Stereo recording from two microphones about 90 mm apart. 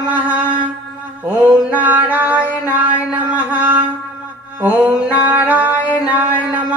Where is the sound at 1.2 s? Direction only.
15° right (ahead or behind).